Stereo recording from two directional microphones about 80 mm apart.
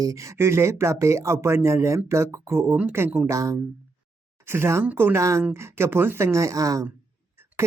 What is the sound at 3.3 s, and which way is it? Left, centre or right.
Speech, right.